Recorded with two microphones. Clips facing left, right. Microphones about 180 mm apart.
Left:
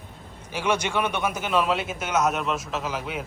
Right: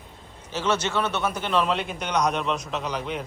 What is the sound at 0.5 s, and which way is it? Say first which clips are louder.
A man's voice: even; 10° left (ahead or behind).